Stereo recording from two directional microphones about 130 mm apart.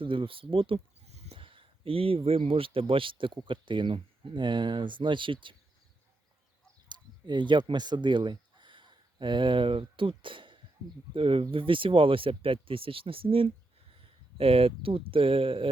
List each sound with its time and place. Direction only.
0.0 s speech: 40° right (ahead or behind)
0.5 s sheep: 45° right (ahead or behind)
1.4 s speech: 40° right (ahead or behind)
6.8 s speech: 35° right (ahead or behind)